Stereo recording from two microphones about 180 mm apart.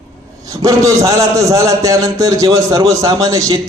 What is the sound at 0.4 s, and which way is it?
A man's voice, 20° right (ahead or behind).